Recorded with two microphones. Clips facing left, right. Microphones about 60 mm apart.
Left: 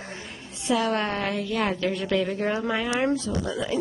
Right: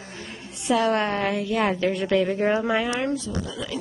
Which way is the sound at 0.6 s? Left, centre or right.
Centre.